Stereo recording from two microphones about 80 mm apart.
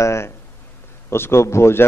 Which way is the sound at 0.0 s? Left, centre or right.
Left.